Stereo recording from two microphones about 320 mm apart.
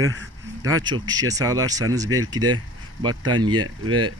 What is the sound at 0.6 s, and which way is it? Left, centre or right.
Speech, centre.